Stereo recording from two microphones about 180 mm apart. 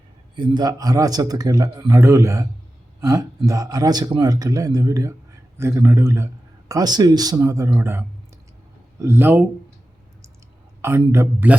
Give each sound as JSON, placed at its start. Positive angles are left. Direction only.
{"t": 0.3, "sound": "speech", "side_deg": -25}
{"t": 10.8, "sound": "speech", "side_deg": -15}